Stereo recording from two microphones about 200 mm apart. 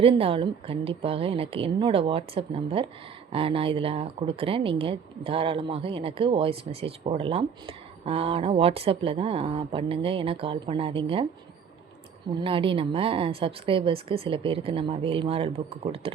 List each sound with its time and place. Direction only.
0.0 s speech: 30° right (ahead or behind)
12.3 s speech: 25° right (ahead or behind)